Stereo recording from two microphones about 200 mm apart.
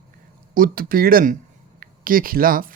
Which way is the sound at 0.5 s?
45° right (ahead or behind).